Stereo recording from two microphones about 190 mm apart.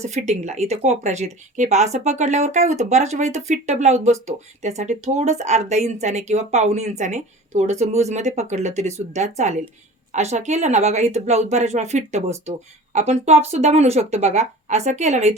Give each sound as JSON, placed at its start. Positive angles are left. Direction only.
{"t": 0.0, "sound": "speech", "side_deg": -35}